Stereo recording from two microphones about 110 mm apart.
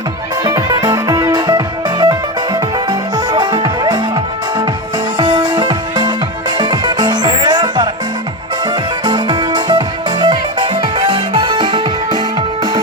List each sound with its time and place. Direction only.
0.4 s music: 30° right (ahead or behind)
3.3 s music: 45° right (ahead or behind)
5.2 s music: 45° right (ahead or behind)
9.0 s music: 45° right (ahead or behind)